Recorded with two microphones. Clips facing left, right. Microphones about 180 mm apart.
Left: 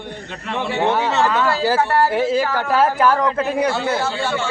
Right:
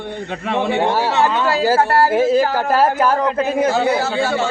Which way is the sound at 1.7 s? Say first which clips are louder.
Right 4 dB; 45° right (ahead or behind).